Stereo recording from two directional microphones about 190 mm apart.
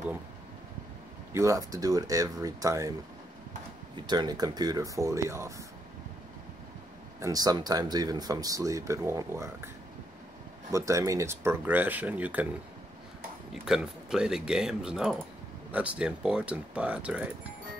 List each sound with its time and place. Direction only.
1.3 s speech: 15° right (ahead or behind)
3.9 s speech: 20° right (ahead or behind)
7.2 s speech: 20° right (ahead or behind)
10.7 s speech: 15° right (ahead or behind)
13.5 s speech: 5° right (ahead or behind)